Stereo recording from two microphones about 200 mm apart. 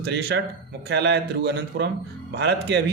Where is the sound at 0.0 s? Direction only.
60° right (ahead or behind).